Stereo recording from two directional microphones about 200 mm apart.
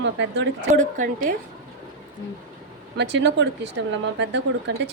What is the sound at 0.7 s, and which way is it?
Speech, 40° right (ahead or behind).